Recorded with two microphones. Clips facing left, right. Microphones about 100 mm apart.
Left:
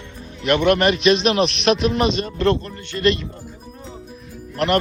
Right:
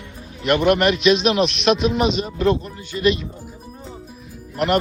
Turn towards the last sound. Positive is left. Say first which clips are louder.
# even
turn(degrees=-5)  # may be behind; listen again after turning